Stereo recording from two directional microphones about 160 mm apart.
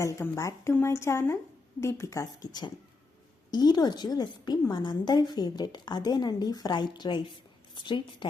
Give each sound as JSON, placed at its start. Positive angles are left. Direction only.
{"t": 0.0, "sound": "a woman's voice", "side_deg": 20}